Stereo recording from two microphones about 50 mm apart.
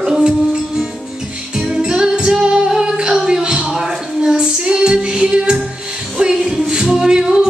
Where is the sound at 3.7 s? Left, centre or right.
Centre.